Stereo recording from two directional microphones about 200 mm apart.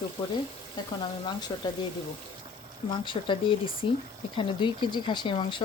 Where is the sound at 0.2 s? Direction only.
25° left (ahead or behind).